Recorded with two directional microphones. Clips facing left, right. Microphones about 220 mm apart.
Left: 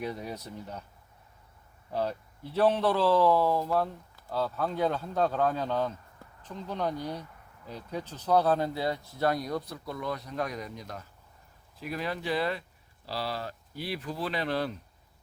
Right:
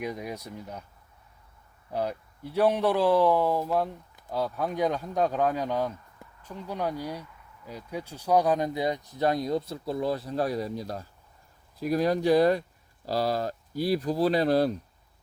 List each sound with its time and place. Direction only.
0.0 s speech: 10° right (ahead or behind)
1.9 s speech: 15° right (ahead or behind); by 14.8 s 40° right (ahead or behind)